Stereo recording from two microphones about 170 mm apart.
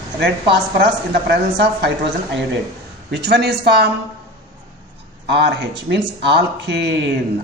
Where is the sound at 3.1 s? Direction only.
75° right (ahead or behind).